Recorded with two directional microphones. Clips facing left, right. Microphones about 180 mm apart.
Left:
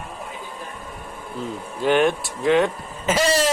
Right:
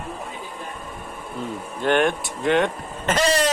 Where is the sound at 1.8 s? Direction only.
5° left (ahead or behind).